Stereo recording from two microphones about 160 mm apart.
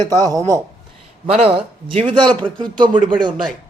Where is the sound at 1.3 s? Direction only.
35° right (ahead or behind).